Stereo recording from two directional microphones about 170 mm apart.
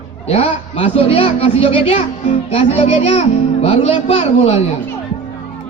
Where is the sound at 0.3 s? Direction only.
35° left (ahead or behind).